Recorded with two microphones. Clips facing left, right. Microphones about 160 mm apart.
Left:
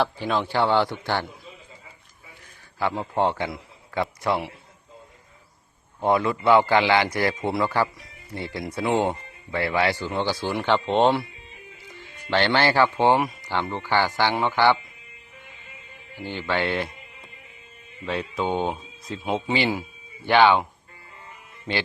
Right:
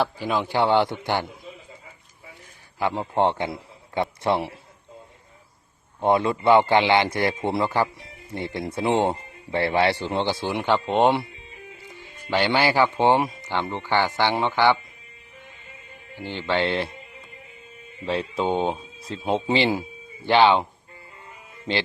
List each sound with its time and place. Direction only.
0.0 s a man's voice: 10° right (ahead or behind)
2.7 s a man's voice: 20° right (ahead or behind)
6.0 s speech: 25° right (ahead or behind)
10.7 s a man's voice: 10° right (ahead or behind)
16.2 s speech: 25° right (ahead or behind)
18.0 s speech: 30° right (ahead or behind)